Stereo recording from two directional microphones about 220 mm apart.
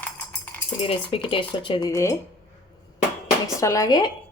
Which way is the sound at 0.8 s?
25° left (ahead or behind).